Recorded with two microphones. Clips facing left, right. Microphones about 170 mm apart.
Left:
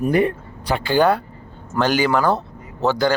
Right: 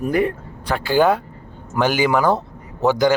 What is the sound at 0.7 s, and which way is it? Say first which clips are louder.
A man's voice: right 1 dB; 10° right (ahead or behind).